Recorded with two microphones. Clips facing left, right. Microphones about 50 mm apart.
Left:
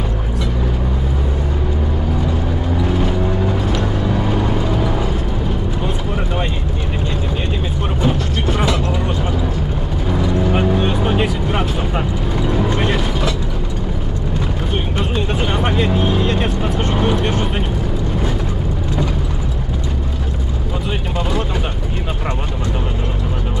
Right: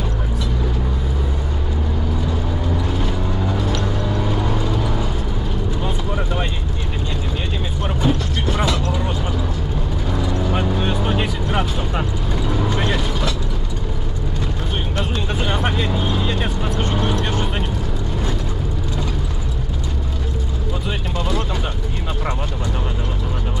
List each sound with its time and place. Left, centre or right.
2.9 s vehicle: centre
8.0 s mechanisms: centre
10.4 s vehicle: centre
15.4 s vehicle: centre